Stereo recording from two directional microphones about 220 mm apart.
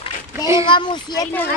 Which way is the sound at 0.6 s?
20° left (ahead or behind).